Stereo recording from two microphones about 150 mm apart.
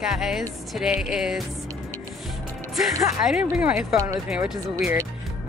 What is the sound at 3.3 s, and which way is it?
Speech, 5° right (ahead or behind).